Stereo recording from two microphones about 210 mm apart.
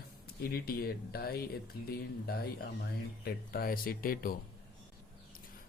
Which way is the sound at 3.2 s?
45° left (ahead or behind).